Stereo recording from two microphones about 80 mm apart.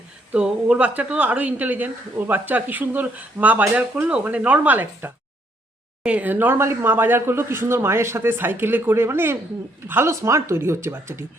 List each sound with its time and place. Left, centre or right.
0.3 s speech: centre; by 11.3 s right